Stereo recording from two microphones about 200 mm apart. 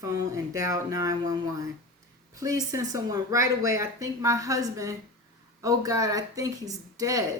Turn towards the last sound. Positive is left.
turn(degrees=-15)  # may be behind; listen again after turning